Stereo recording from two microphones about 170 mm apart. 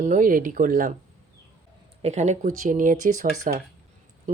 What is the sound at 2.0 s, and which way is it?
Speech, 40° right (ahead or behind).